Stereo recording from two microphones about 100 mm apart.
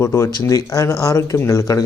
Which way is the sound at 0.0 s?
30° left (ahead or behind).